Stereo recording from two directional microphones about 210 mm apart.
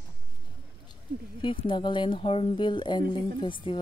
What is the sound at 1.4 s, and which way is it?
Speech, 25° left (ahead or behind).